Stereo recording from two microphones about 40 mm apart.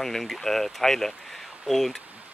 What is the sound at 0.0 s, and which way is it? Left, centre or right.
Speech, centre.